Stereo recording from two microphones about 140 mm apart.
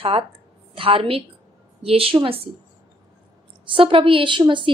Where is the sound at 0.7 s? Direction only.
40° right (ahead or behind).